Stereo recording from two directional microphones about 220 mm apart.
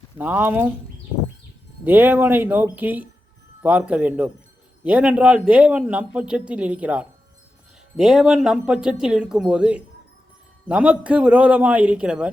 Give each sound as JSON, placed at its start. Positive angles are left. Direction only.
{"t": 0.2, "sound": "speech", "side_deg": -10}
{"t": 1.8, "sound": "a man's voice", "side_deg": -10}